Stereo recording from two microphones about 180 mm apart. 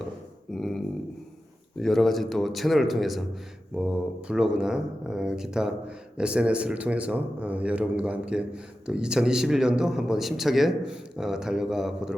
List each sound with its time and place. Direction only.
0.5 s dog: centre (ahead or behind)
1.8 s speech: centre (ahead or behind)